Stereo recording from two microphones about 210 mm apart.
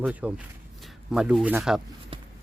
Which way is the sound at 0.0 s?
5° right (ahead or behind).